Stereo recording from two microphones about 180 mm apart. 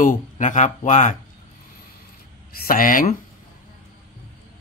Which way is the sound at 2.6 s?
50° left (ahead or behind).